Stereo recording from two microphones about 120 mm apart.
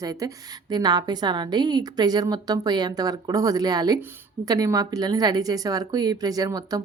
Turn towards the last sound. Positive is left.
turn(degrees=-30)  # may be behind; listen again after turning